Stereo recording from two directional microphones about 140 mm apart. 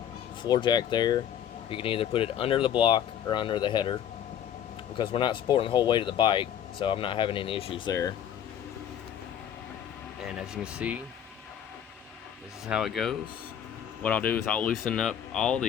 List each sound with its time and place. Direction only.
0.4 s speech: 30° left (ahead or behind)
4.9 s speech: 35° left (ahead or behind)
10.2 s speech: 5° right (ahead or behind)
12.6 s speech: 5° right (ahead or behind)
14.0 s speech: 10° left (ahead or behind)